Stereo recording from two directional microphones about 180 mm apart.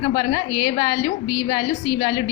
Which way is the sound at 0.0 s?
25° left (ahead or behind).